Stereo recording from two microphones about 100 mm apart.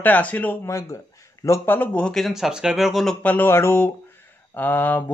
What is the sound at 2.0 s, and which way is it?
Speech, 5° left (ahead or behind).